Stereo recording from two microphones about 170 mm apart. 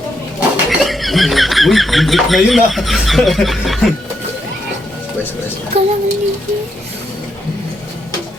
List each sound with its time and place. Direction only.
0.3 s speech: 5° right (ahead or behind)
5.7 s speech: 35° right (ahead or behind)